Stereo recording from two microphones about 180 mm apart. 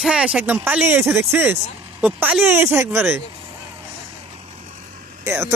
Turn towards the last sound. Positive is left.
turn(degrees=-15)  # may be behind; listen again after turning